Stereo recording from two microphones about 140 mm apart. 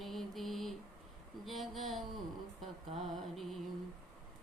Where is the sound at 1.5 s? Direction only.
Centre (ahead or behind).